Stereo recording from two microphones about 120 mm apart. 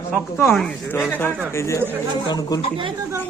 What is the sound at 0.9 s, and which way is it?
Speech, 15° left (ahead or behind).